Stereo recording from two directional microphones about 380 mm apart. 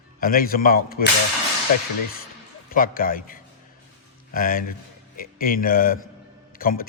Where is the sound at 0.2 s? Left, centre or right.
Left.